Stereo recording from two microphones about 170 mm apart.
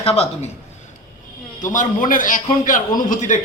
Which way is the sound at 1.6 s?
50° left (ahead or behind).